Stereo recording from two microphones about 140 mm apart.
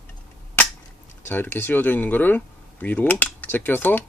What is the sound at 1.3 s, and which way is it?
Speech, 15° left (ahead or behind).